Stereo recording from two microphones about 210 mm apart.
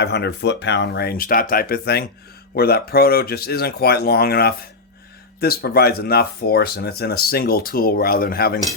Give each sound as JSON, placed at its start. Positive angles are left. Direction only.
{"t": 0.0, "sound": "speech", "side_deg": 50}